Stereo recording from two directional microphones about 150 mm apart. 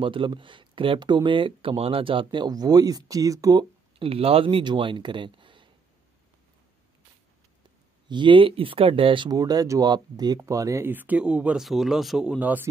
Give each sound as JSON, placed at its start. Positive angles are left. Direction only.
{"t": 0.0, "sound": "speech", "side_deg": -35}
{"t": 4.0, "sound": "speech", "side_deg": -40}
{"t": 8.1, "sound": "speech", "side_deg": -30}